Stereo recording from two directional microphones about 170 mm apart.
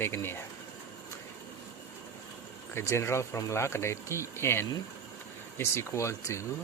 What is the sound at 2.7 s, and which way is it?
Speech, 15° left (ahead or behind).